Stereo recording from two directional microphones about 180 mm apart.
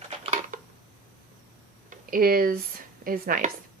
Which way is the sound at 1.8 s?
50° right (ahead or behind).